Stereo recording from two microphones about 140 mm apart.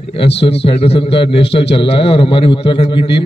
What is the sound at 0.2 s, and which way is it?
A man's voice, 45° left (ahead or behind).